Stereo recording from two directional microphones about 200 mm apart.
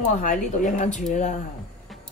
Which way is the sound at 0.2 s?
40° left (ahead or behind).